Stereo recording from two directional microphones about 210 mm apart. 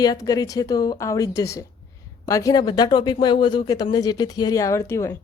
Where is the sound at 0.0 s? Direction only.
20° left (ahead or behind).